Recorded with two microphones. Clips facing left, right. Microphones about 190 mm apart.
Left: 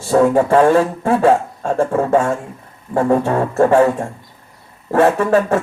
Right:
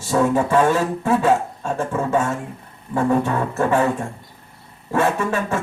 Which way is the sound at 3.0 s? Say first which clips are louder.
Left 4 dB; 45° left (ahead or behind).